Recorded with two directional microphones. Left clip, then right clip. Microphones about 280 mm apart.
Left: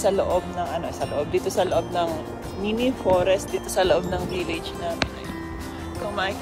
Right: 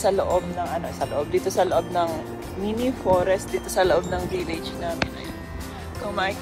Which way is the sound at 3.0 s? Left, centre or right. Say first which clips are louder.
Even; centre.